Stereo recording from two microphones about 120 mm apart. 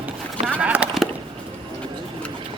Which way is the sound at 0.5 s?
10° right (ahead or behind).